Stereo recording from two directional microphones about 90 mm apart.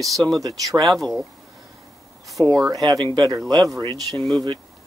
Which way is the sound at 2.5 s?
40° right (ahead or behind).